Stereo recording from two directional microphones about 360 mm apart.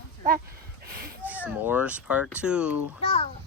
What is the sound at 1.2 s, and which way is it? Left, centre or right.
Speech, centre.